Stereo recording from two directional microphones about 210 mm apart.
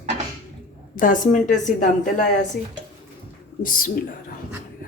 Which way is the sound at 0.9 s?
40° left (ahead or behind).